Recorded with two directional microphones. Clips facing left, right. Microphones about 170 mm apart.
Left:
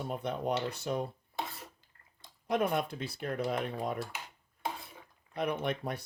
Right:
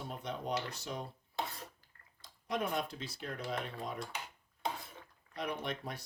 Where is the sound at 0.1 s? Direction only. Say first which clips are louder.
Left 5 dB; 55° left (ahead or behind).